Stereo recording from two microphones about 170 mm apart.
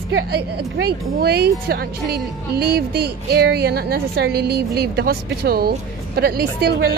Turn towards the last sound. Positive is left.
turn(degrees=-65)  # may be behind; listen again after turning